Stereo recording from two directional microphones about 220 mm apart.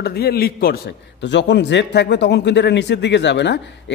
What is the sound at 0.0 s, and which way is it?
Speech, 45° left (ahead or behind).